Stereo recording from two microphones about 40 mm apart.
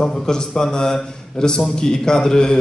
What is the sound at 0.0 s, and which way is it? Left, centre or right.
A man's voice, centre.